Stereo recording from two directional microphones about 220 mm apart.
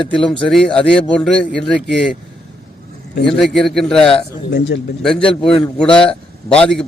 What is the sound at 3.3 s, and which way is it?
Speech, centre (ahead or behind).